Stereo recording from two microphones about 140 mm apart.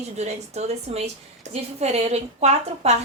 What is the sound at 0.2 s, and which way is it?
Speech, 50° right (ahead or behind).